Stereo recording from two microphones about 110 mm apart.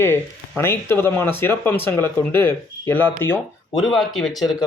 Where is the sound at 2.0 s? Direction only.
45° right (ahead or behind).